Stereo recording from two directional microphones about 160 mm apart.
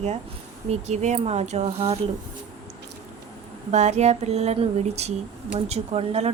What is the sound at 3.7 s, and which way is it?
Speech, 45° right (ahead or behind).